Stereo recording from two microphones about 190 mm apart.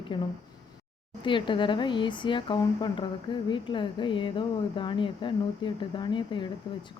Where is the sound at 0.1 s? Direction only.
25° left (ahead or behind).